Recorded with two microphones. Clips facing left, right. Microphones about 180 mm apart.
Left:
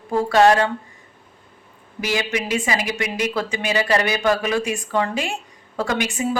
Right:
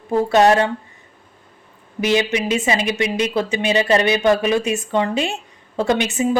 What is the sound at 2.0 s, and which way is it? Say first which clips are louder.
Speech: right 5 dB; 20° right (ahead or behind).